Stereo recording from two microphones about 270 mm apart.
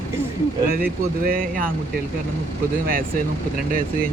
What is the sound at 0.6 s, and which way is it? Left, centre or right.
Speech, right.